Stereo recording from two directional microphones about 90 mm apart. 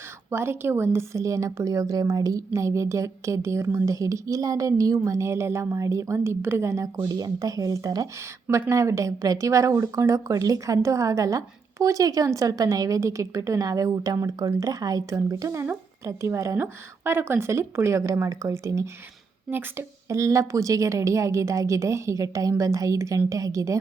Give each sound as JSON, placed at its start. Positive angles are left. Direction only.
{"t": 0.3, "sound": "speech", "side_deg": -30}
{"t": 6.1, "sound": "a woman's voice", "side_deg": -25}
{"t": 19.5, "sound": "speech", "side_deg": -25}